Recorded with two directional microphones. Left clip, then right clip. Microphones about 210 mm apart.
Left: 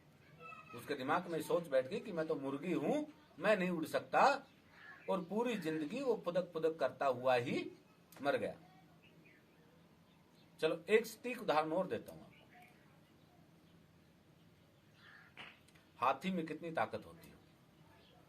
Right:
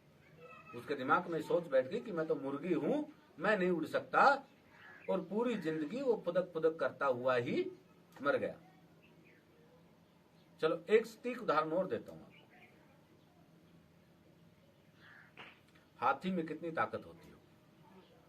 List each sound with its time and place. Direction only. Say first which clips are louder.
0.9 s speech: right 4 dB; 25° left (ahead or behind)
10.8 s speech: right 2 dB; 25° left (ahead or behind)
16.0 s speech: right 2 dB; 25° left (ahead or behind)